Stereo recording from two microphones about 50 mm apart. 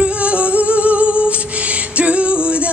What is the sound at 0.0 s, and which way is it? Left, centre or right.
Humming, right.